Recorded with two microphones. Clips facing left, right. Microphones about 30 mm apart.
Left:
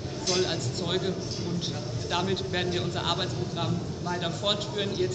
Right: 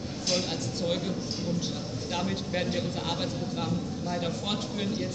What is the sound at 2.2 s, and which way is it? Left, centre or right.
A man's voice, left.